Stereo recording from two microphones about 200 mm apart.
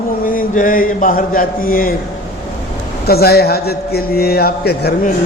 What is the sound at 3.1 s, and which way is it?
A man's voice, 50° left (ahead or behind).